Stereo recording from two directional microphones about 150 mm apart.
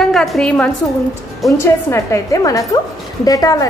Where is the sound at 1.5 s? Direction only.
20° left (ahead or behind).